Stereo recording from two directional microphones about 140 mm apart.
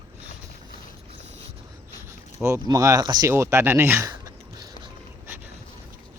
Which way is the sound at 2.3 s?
20° right (ahead or behind).